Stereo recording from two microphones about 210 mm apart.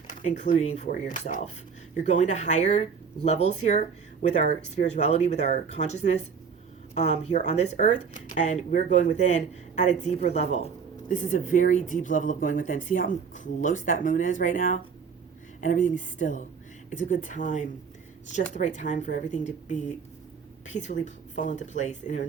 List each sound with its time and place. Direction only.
0.2 s speech: 35° left (ahead or behind)